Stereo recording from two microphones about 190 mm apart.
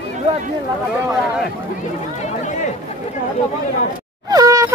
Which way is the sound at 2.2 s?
40° left (ahead or behind).